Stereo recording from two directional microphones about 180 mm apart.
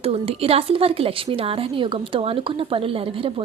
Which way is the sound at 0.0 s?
35° right (ahead or behind).